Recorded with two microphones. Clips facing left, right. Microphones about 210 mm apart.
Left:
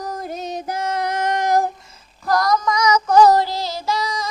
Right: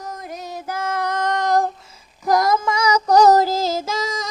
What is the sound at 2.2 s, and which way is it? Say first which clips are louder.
Female singing: right 1 dB; 20° right (ahead or behind).